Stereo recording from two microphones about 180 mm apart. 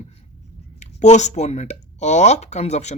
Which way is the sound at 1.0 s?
40° left (ahead or behind).